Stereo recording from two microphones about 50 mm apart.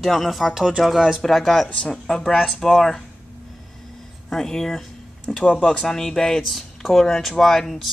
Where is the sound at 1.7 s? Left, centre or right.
Centre.